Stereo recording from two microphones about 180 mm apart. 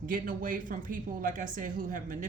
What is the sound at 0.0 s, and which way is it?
A woman's voice, 50° right (ahead or behind).